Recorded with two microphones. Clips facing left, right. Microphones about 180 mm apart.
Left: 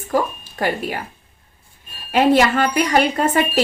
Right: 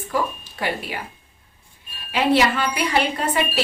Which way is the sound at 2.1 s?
50° left (ahead or behind).